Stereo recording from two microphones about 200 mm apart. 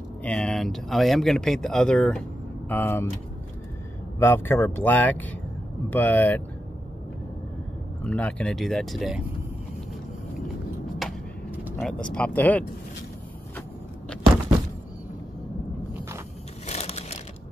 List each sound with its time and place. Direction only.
0.2 s speech: 5° left (ahead or behind)
4.2 s speech: 10° left (ahead or behind)
8.0 s speech: 5° left (ahead or behind)
11.0 s vehicle: 5° right (ahead or behind)
11.9 s speech: 5° left (ahead or behind)
16.6 s crushing: 35° left (ahead or behind)